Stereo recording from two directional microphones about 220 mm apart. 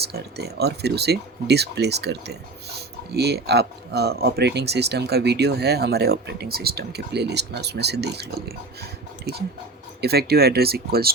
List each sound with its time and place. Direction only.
0.0 s speech: 45° right (ahead or behind)